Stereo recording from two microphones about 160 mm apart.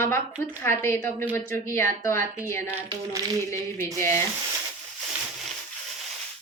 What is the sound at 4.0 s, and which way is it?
Speech, 15° left (ahead or behind).